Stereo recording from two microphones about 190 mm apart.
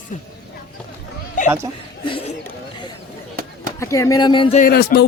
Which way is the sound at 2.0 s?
25° left (ahead or behind).